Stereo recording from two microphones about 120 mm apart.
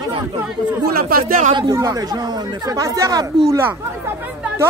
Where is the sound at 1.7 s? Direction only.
30° right (ahead or behind).